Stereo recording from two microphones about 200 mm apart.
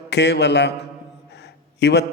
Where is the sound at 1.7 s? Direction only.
55° left (ahead or behind).